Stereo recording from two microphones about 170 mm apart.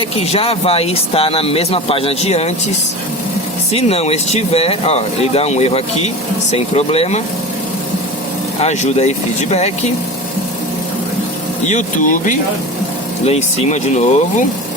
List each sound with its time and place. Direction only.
0.2 s speech: 35° left (ahead or behind)
3.7 s speech: 35° left (ahead or behind)
8.6 s speech: 40° left (ahead or behind)
11.7 s speech: 50° left (ahead or behind)
13.2 s speech: 40° left (ahead or behind)